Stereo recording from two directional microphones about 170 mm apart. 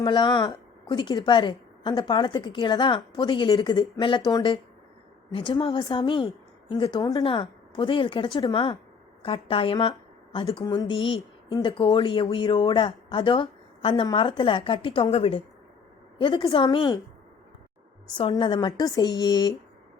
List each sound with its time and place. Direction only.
0.0 s a woman's voice: 25° left (ahead or behind)
18.1 s a woman's voice: 30° left (ahead or behind)